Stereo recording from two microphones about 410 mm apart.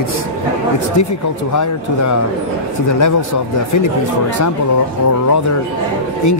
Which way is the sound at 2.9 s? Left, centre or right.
Left.